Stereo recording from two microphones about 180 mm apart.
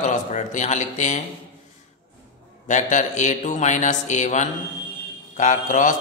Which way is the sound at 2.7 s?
40° left (ahead or behind).